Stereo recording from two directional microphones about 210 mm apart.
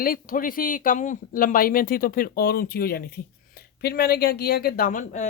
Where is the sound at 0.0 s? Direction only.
40° left (ahead or behind).